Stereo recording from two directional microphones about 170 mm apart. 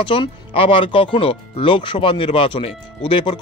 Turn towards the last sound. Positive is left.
turn(degrees=35)  # may be behind; listen again after turning